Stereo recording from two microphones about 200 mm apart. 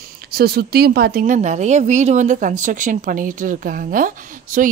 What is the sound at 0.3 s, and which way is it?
Speech, 50° right (ahead or behind).